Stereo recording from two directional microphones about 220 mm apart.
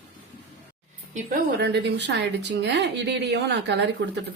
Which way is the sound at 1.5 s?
50° right (ahead or behind).